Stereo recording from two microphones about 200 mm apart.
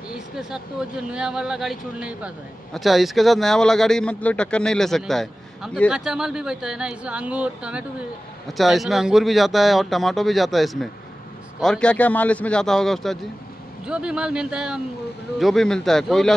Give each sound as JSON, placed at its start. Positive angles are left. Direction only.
{"t": 0.1, "sound": "speech", "side_deg": -5}